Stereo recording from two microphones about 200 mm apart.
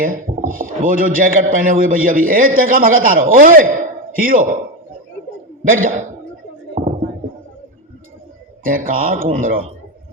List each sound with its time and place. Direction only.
0.0 s speech: 45° right (ahead or behind)
5.6 s speech: 45° right (ahead or behind)
6.8 s a sound: 35° right (ahead or behind)
8.6 s speech: 45° right (ahead or behind)